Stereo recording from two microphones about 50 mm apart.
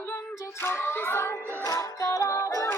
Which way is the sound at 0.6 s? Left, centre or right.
Left.